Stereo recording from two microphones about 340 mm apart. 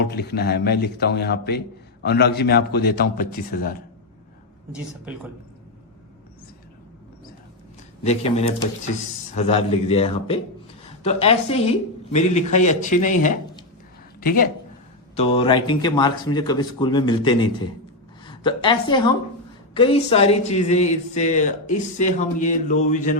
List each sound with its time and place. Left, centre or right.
0.0 s speech: left
8.0 s a woman's voice: centre